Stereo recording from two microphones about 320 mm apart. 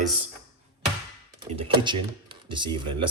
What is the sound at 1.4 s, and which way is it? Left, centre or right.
Speech, centre.